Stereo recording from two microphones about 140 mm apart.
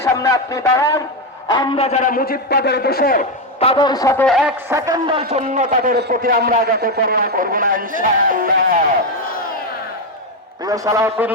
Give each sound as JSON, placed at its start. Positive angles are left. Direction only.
{"t": 0.0, "sound": "a man's voice", "side_deg": 25}
{"t": 1.8, "sound": "a man's voice", "side_deg": 55}
{"t": 3.6, "sound": "a man's voice", "side_deg": 45}
{"t": 3.8, "sound": "speech", "side_deg": 25}
{"t": 4.3, "sound": "speech", "side_deg": -5}
{"t": 5.0, "sound": "a man's voice", "side_deg": -45}
{"t": 10.6, "sound": "a man's voice", "side_deg": -25}